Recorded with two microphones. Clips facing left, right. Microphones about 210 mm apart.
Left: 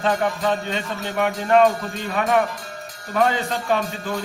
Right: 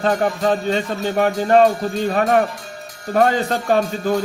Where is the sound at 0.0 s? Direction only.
40° right (ahead or behind).